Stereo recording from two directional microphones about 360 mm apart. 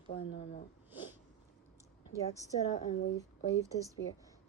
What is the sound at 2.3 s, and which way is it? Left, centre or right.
Speech, centre.